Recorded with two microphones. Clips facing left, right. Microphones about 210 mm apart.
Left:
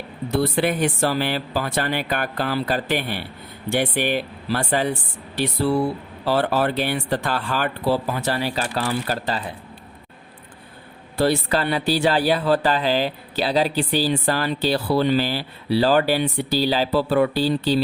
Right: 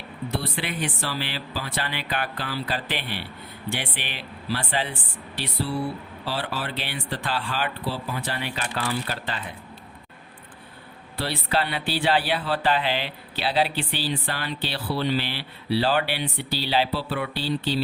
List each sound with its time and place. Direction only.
0.3 s speech: 45° left (ahead or behind)
11.2 s speech: 45° left (ahead or behind)